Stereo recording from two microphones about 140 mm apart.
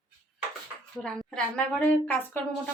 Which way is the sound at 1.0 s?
5° left (ahead or behind).